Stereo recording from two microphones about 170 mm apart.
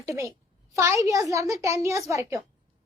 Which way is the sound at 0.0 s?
20° right (ahead or behind).